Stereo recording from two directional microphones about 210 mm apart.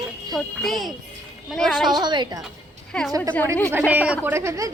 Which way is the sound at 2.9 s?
5° left (ahead or behind).